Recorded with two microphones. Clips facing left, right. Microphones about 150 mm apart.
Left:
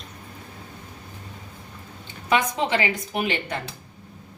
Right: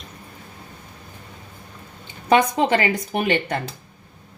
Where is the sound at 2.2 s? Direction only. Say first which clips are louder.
Right 5 dB; 40° right (ahead or behind).